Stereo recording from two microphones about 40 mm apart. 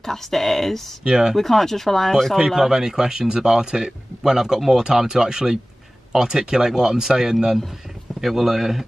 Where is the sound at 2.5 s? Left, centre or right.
Centre.